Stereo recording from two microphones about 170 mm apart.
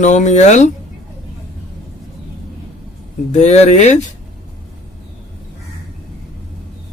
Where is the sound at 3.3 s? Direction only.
40° left (ahead or behind).